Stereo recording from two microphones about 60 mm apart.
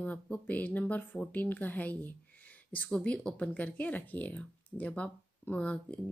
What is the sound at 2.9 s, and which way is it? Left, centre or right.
A woman's voice, centre.